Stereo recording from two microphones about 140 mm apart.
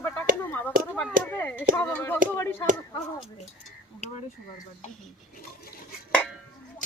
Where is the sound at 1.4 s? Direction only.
15° left (ahead or behind).